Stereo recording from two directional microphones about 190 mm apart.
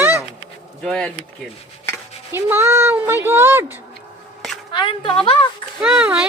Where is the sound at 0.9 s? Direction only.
5° left (ahead or behind).